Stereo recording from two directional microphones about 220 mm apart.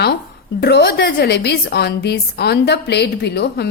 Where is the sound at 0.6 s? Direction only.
50° left (ahead or behind).